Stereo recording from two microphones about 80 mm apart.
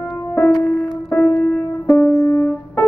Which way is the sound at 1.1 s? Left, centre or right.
Centre.